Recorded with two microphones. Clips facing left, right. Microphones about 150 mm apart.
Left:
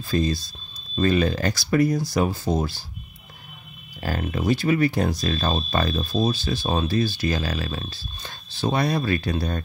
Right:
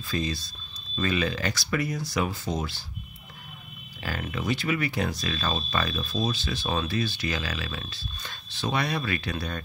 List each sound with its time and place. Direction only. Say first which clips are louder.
0.1 s speech: left 7 dB; 40° left (ahead or behind)
4.0 s speech: left 6 dB; 40° left (ahead or behind)